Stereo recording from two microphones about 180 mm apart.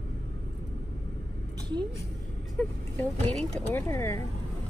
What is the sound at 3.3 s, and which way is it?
Speech, 10° left (ahead or behind).